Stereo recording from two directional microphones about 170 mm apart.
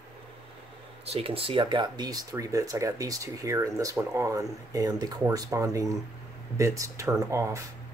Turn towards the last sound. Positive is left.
turn(degrees=-15)  # may be behind; listen again after turning